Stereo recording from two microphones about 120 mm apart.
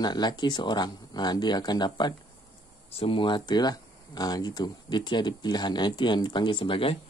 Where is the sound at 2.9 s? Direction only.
50° left (ahead or behind).